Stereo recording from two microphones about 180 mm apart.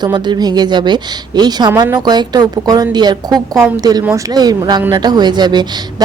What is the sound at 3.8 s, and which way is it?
A woman's voice, 20° right (ahead or behind).